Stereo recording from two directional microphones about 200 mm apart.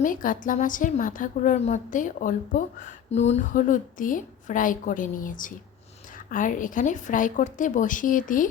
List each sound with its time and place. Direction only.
0.0 s a woman's voice: 40° left (ahead or behind)